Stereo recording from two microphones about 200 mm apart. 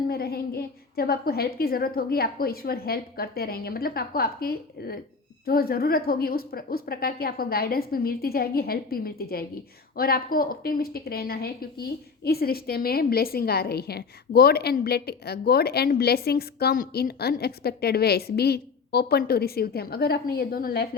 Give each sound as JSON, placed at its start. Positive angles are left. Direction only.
{"t": 0.1, "sound": "speech", "side_deg": 50}